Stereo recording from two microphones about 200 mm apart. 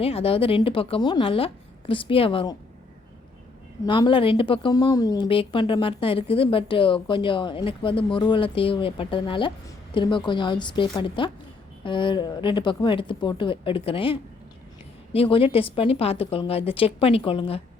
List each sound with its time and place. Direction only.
0.0 s speech: 30° left (ahead or behind)
3.8 s speech: 25° left (ahead or behind)